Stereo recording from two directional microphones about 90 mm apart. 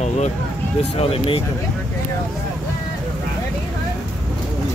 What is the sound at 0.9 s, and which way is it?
Speech, 90° left.